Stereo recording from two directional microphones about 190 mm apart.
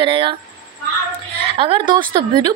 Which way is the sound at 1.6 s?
25° right (ahead or behind).